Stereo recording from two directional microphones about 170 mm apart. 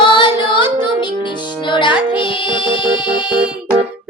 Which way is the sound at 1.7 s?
30° left (ahead or behind).